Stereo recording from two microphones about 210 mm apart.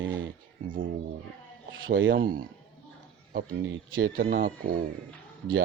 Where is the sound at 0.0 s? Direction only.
65° right (ahead or behind).